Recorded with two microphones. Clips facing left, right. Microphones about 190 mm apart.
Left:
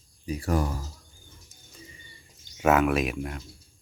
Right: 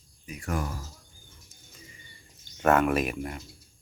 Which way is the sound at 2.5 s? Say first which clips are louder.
Left 1 dB; 5° left (ahead or behind).